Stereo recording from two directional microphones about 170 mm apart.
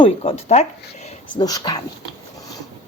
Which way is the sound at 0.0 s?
35° left (ahead or behind).